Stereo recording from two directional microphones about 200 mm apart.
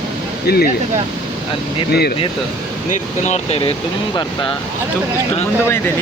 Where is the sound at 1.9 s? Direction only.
50° left (ahead or behind).